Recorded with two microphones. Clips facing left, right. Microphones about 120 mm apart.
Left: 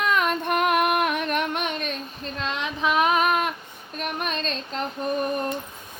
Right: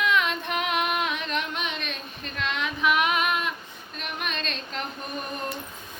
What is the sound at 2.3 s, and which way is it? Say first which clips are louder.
Child singing: even; 30° left (ahead or behind).